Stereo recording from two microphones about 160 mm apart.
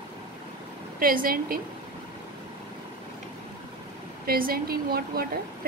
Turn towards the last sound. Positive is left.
turn(degrees=-70)  # may be behind; listen again after turning